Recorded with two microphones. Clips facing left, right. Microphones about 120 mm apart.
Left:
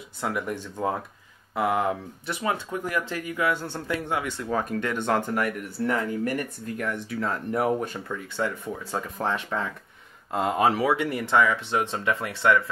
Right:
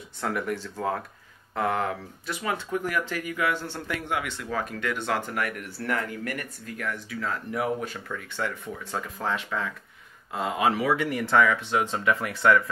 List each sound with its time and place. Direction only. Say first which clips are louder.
0.2 s speech: even; 20° left (ahead or behind)
4.6 s speech: left 3 dB; 45° left (ahead or behind)
5.3 s speech: left 4 dB; 25° left (ahead or behind)
7.5 s speech: left 4 dB; 40° left (ahead or behind)
7.9 s speech: left 2 dB; 20° left (ahead or behind)